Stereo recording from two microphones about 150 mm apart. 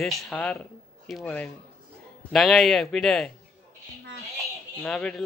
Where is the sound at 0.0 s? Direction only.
5° left (ahead or behind).